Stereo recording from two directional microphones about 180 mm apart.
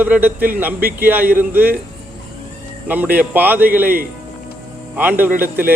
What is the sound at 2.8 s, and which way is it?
A man's voice, 10° right (ahead or behind).